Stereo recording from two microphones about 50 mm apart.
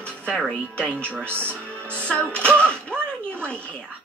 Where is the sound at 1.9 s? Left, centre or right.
Left.